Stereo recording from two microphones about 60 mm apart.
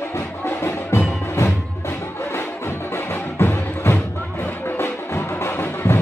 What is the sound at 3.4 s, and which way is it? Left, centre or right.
Music, left.